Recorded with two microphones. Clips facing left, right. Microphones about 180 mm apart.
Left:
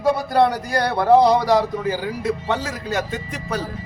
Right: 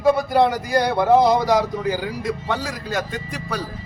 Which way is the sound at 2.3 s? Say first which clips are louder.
Left 3 dB; 10° right (ahead or behind).